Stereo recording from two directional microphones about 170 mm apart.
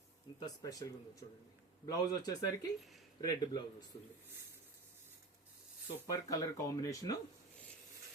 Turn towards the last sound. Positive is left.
turn(degrees=20)  # may be behind; listen again after turning